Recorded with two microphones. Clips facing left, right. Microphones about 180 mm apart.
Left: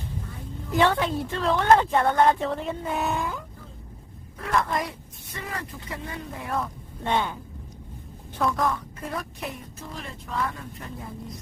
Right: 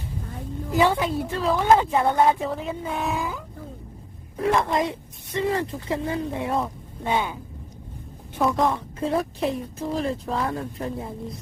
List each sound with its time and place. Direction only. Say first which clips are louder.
0.7 s a woman's voice: right 1 dB; 5° right (ahead or behind)
4.4 s a woman's voice: right 4 dB; 30° right (ahead or behind)
7.0 s speech: right 1 dB; 10° right (ahead or behind)
8.4 s a woman's voice: right 3 dB; 25° right (ahead or behind)